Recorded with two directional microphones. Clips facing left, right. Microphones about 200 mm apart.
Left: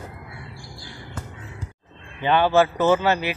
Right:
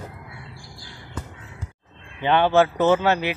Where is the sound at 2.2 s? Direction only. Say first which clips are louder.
Even; 10° left (ahead or behind).